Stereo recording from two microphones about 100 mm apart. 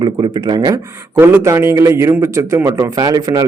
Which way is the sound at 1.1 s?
25° right (ahead or behind).